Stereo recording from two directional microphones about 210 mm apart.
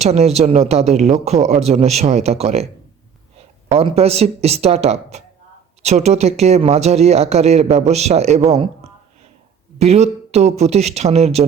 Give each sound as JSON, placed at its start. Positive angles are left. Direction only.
{"t": 0.0, "sound": "speech", "side_deg": -30}